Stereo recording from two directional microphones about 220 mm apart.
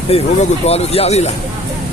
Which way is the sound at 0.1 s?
25° left (ahead or behind).